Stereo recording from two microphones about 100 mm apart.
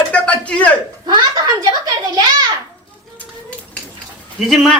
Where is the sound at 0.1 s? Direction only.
15° left (ahead or behind).